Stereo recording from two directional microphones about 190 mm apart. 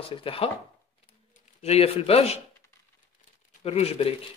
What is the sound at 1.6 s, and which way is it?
Speech, 30° left (ahead or behind).